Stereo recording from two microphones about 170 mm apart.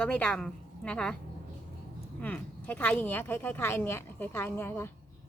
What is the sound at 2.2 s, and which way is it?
Speech, 10° left (ahead or behind).